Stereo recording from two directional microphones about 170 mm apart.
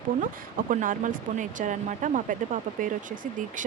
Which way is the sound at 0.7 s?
50° right (ahead or behind).